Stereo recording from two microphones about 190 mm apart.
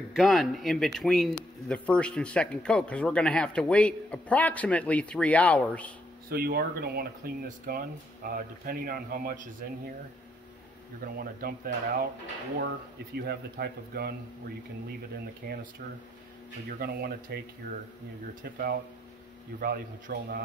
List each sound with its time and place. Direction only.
0.1 s speech: centre (ahead or behind)
6.2 s speech: 50° right (ahead or behind)
11.1 s speech: 50° right (ahead or behind)
13.2 s speech: 55° right (ahead or behind)
15.4 s speech: 50° right (ahead or behind)
16.7 s speech: 55° right (ahead or behind)
18.4 s speech: 50° right (ahead or behind)